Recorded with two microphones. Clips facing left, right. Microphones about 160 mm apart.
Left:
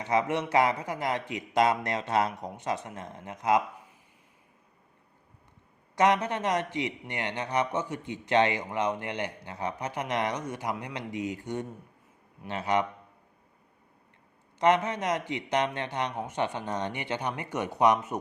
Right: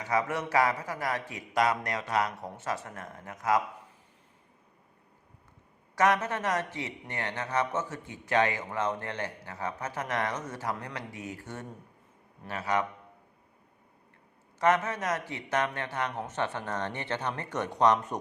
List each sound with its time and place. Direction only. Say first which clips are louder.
0.0 s a man's voice: left 3 dB; 20° left (ahead or behind)
6.0 s a man's voice: left 2 dB; 20° left (ahead or behind)
14.6 s speech: left 2 dB; 20° left (ahead or behind)